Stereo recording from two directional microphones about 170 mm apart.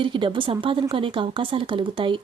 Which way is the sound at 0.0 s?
30° right (ahead or behind).